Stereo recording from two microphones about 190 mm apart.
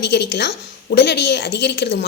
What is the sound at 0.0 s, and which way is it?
A woman's voice, 60° left (ahead or behind).